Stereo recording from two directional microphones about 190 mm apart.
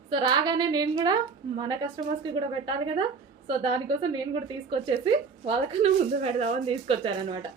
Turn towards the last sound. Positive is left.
turn(degrees=-30)  # may be behind; listen again after turning